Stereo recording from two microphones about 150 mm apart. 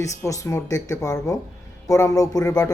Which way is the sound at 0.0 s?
20° left (ahead or behind).